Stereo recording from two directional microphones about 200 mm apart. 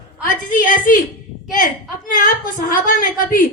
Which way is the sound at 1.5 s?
45° left (ahead or behind).